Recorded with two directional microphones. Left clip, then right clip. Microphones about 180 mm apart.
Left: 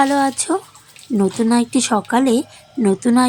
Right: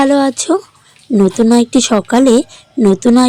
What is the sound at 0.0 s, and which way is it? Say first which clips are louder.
A woman's voice: right 4 dB; 25° right (ahead or behind).